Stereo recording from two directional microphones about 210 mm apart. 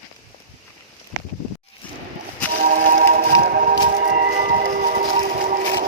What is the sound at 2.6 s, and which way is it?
Music, 40° right (ahead or behind).